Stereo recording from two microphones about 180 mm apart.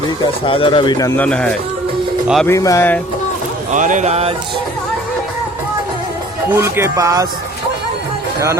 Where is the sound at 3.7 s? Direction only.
45° right (ahead or behind).